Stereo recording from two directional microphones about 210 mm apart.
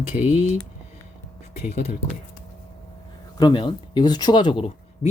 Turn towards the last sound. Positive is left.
turn(degrees=25)  # may be behind; listen again after turning